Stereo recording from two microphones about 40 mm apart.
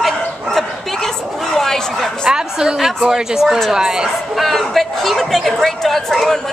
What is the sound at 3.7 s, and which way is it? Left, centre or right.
Speech, centre.